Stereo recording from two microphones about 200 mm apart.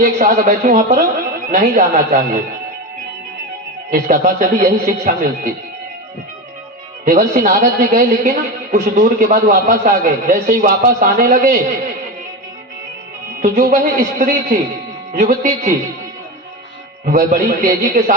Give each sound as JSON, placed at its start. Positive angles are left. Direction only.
{"t": 0.0, "sound": "a man's voice", "side_deg": -40}
{"t": 3.9, "sound": "a man's voice", "side_deg": -40}
{"t": 7.0, "sound": "a man's voice", "side_deg": -40}
{"t": 13.4, "sound": "a man's voice", "side_deg": -45}
{"t": 17.1, "sound": "a man's voice", "side_deg": -45}